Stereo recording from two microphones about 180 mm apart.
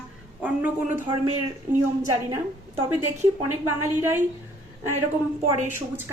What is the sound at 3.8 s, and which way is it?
Speech, 15° right (ahead or behind).